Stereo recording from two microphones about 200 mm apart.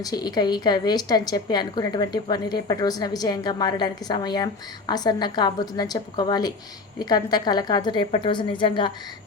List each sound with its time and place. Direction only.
0.0 s a woman's voice: 20° left (ahead or behind)